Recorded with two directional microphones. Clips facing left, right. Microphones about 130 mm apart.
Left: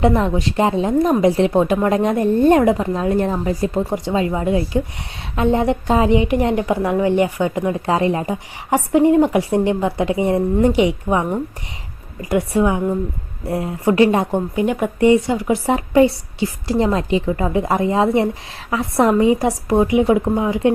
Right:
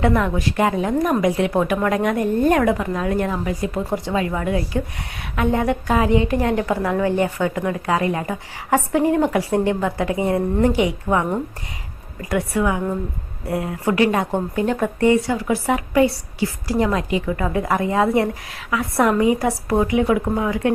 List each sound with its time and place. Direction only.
0.0 s a woman's voice: 25° left (ahead or behind)
3.8 s a woman's voice: 20° left (ahead or behind)
14.3 s a woman's voice: 15° left (ahead or behind)